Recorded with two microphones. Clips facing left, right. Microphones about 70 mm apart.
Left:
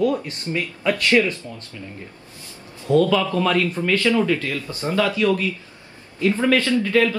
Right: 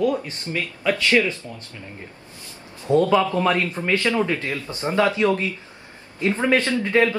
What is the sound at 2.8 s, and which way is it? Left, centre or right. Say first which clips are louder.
A man's voice: even; right.